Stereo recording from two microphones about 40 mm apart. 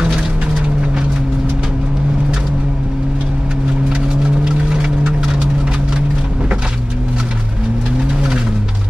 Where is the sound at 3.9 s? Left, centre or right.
Right.